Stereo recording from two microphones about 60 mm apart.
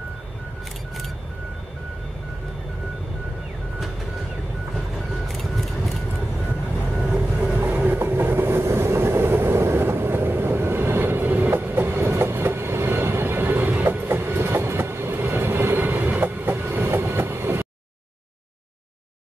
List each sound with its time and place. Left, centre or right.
5.3 s a sound: centre
7.0 s train: centre
7.5 s train: right
13.8 s train: right